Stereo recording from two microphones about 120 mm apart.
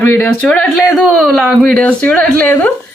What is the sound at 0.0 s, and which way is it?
Speech, 20° left (ahead or behind).